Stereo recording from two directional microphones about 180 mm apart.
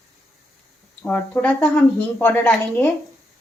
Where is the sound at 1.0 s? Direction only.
10° left (ahead or behind).